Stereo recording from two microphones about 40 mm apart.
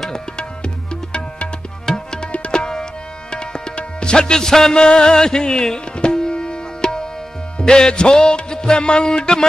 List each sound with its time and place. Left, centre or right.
1.9 s tabla: centre
2.3 s tabla: left
7.5 s music: centre